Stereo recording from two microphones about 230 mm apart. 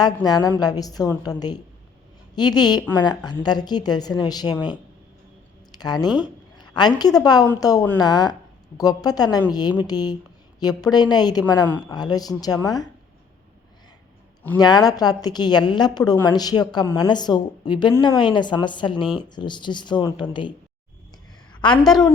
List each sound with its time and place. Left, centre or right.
0.0 s a woman's voice: centre
14.6 s a woman's voice: centre
21.5 s a sound: centre